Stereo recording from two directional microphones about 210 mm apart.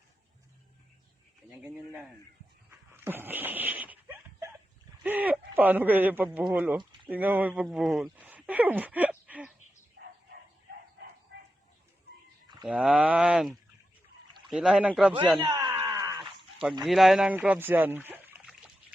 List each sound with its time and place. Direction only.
1.5 s speech: 10° right (ahead or behind)
2.6 s dog: 10° right (ahead or behind)
5.0 s a man's voice: 10° right (ahead or behind)
12.6 s a sound: centre (ahead or behind)
15.4 s a sound: 20° right (ahead or behind)
16.8 s speech: centre (ahead or behind)